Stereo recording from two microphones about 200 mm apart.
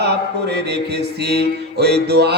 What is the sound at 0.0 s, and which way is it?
Mantra, 55° right (ahead or behind).